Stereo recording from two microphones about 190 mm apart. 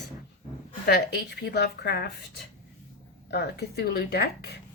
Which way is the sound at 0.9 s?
60° left (ahead or behind).